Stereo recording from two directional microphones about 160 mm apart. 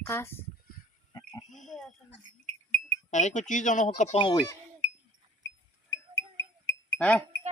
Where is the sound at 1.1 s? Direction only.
20° left (ahead or behind).